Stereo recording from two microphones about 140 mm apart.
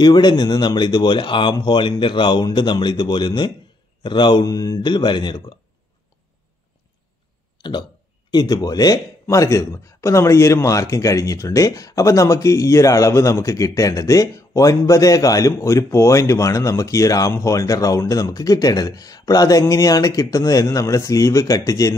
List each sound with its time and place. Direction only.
0.0 s speech: 30° left (ahead or behind)
7.5 s a sound: 35° left (ahead or behind)
8.3 s speech: 30° left (ahead or behind)